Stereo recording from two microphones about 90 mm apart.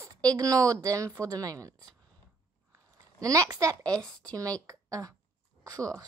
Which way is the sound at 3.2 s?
45° right (ahead or behind).